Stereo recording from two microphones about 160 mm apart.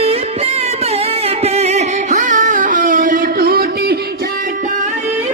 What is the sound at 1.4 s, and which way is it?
Music, 45° right (ahead or behind).